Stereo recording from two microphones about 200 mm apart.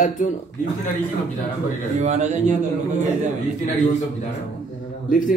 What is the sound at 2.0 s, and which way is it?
Speech, 35° right (ahead or behind).